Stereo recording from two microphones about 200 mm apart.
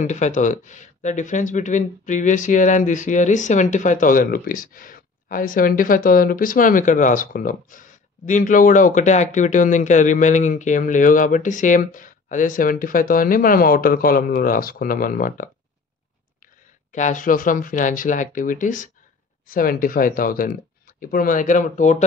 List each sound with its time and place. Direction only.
0.0 s speech: 35° left (ahead or behind)
16.9 s speech: 40° left (ahead or behind)